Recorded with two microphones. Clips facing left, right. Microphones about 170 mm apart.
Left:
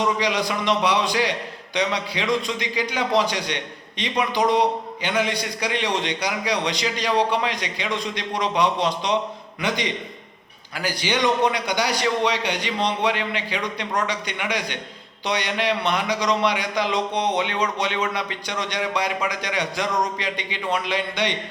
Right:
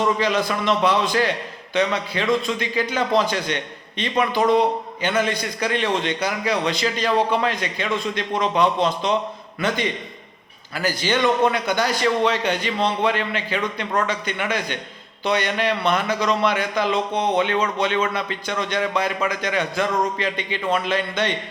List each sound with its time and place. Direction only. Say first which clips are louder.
0.0 s a man's voice: right 2 dB; 15° left (ahead or behind)